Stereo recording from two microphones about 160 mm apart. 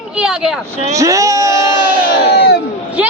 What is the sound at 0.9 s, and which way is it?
Speech, 20° right (ahead or behind).